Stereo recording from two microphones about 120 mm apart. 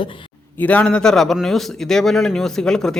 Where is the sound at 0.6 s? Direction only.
15° left (ahead or behind).